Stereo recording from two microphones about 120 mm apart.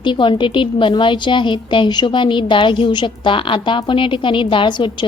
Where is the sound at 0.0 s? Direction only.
40° left (ahead or behind).